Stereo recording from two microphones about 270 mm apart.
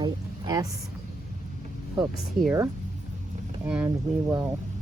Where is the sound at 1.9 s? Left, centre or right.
Centre.